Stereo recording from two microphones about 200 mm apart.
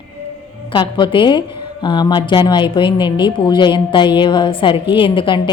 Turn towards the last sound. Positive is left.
turn(degrees=25)  # may be behind; listen again after turning